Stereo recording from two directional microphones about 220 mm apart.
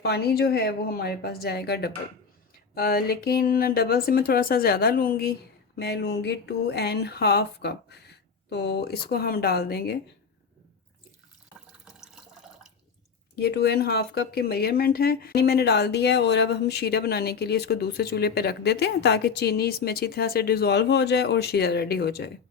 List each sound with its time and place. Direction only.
0.0 s speech: 45° left (ahead or behind)
11.9 s water: centre (ahead or behind)
13.3 s speech: 50° left (ahead or behind)